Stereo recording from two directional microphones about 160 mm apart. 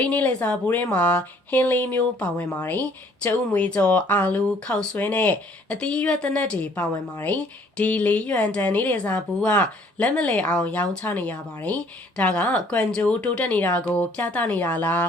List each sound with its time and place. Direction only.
0.0 s speech: 10° left (ahead or behind)